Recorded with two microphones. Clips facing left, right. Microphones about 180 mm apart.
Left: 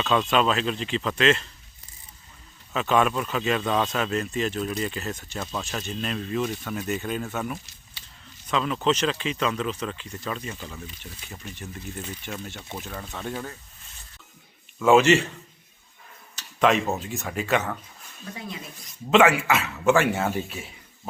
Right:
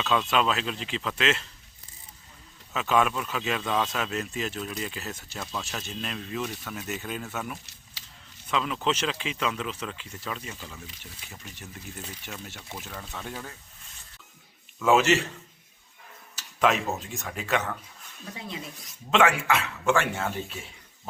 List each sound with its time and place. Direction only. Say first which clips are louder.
0.0 s speech: left 3 dB; 5° right (ahead or behind)
2.7 s speech: left 3 dB; 5° right (ahead or behind)
8.0 s a sound: even; 90° right
8.4 s speech: left 4 dB; 5° right (ahead or behind)
14.8 s speech: left 4 dB; centre (ahead or behind)
16.3 s a sound: left 3 dB; 5° right (ahead or behind)
17.0 s speech: left 5 dB; centre (ahead or behind)
18.8 s speech: left 4 dB; 5° left (ahead or behind)